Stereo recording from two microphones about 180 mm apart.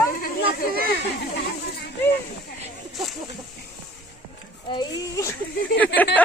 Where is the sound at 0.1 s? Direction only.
55° left (ahead or behind).